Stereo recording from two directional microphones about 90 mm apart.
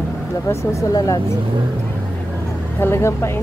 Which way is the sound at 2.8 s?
30° left (ahead or behind).